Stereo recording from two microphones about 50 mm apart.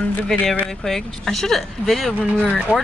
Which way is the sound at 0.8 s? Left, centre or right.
Centre.